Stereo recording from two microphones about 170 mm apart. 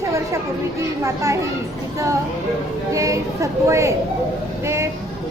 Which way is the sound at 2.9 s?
20° right (ahead or behind).